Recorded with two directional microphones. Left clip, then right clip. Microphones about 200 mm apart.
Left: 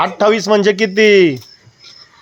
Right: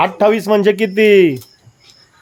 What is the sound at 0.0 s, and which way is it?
A child's voice, 10° right (ahead or behind).